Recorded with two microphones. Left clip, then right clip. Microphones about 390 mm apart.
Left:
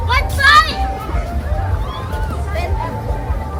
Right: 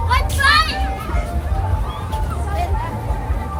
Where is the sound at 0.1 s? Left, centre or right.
Centre.